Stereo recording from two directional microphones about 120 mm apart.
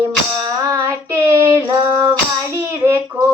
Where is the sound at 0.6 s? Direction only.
25° right (ahead or behind).